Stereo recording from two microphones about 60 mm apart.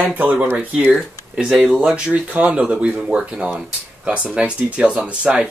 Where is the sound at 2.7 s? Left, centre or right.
Centre.